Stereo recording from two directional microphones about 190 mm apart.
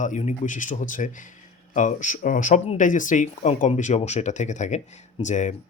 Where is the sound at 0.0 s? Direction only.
40° left (ahead or behind).